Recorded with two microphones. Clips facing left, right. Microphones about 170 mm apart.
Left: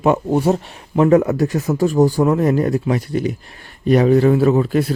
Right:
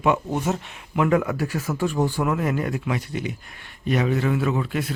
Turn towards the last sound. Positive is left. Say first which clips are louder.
# left 9 dB
turn(degrees=40)  # may be behind; listen again after turning